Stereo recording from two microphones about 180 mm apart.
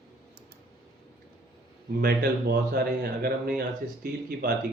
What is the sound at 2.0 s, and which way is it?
Speech, 60° right (ahead or behind).